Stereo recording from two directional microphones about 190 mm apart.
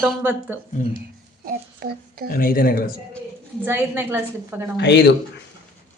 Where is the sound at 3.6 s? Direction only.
10° right (ahead or behind).